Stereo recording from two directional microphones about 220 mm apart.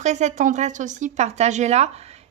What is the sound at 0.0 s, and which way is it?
Speech, 30° right (ahead or behind).